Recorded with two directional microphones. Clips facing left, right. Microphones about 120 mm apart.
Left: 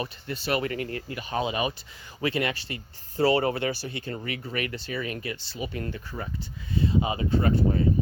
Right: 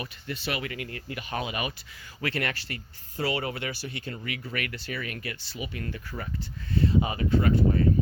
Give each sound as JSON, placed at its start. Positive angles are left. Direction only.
{"t": 0.0, "sound": "speech", "side_deg": 35}
{"t": 2.2, "sound": "speech", "side_deg": 15}
{"t": 3.2, "sound": "speech", "side_deg": 30}
{"t": 5.5, "sound": "speech", "side_deg": 35}
{"t": 6.7, "sound": "speech", "side_deg": 20}